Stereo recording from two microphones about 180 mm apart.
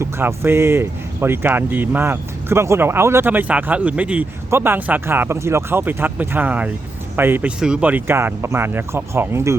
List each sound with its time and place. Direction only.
0.0 s speech: 15° right (ahead or behind)